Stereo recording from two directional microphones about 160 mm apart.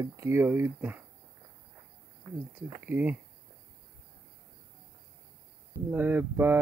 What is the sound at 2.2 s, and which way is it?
Speech, 10° right (ahead or behind).